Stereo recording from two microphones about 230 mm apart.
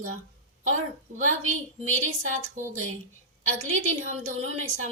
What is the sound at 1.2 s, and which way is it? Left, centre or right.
A woman's voice, right.